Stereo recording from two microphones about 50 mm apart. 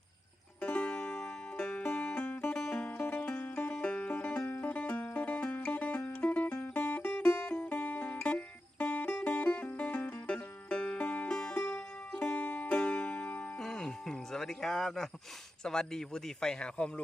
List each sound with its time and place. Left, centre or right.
0.6 s music: left
1.8 s music: left
8.2 s music: left
13.6 s music: centre
15.6 s speech: centre